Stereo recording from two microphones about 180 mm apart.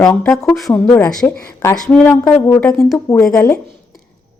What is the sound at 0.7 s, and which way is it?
A woman's voice, 15° left (ahead or behind).